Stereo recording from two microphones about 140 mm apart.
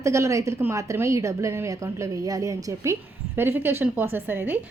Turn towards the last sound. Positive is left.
turn(degrees=-15)  # may be behind; listen again after turning